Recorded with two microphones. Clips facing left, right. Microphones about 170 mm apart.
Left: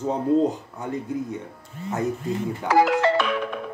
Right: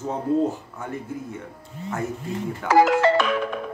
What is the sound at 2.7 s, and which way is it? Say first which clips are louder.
Music: right 2 dB; 45° right (ahead or behind).